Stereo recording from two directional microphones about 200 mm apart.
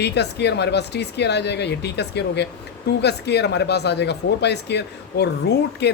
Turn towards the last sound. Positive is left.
turn(degrees=55)  # may be behind; listen again after turning